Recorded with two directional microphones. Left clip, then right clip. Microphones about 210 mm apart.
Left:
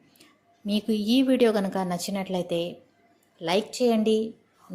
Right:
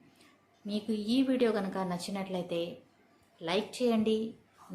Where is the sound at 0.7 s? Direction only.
30° left (ahead or behind).